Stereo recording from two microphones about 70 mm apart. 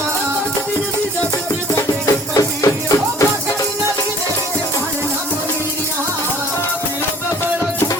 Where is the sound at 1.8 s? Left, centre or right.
Left.